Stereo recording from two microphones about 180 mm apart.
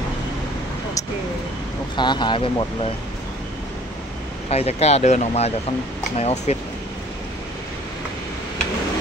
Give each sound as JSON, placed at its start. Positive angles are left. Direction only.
{"t": 2.0, "sound": "speech", "side_deg": 25}
{"t": 4.5, "sound": "speech", "side_deg": 35}